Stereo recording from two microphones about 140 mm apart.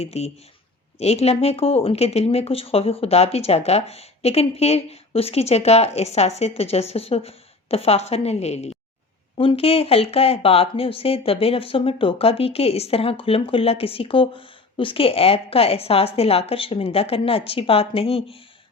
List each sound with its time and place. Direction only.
0.0 s speech: 50° left (ahead or behind)